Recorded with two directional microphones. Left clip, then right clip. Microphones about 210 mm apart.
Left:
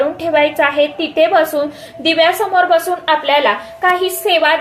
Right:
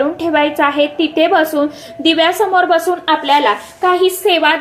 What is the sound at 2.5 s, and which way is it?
A woman's voice, 30° right (ahead or behind).